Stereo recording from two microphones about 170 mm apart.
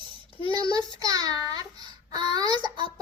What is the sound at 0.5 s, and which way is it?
Child singing, 25° right (ahead or behind).